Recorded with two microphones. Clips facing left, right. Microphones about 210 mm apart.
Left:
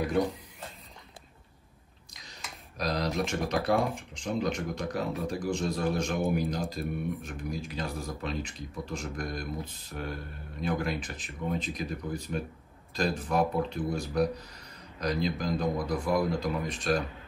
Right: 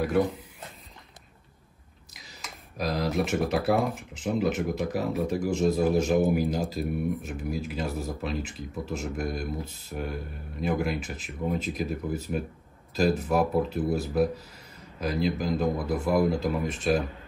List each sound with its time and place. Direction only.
2.8 s speech: centre (ahead or behind)